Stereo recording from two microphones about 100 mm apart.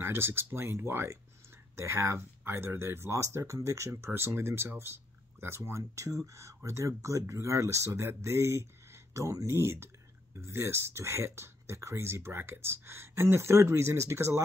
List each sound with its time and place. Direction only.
0.0 s speech: 25° right (ahead or behind)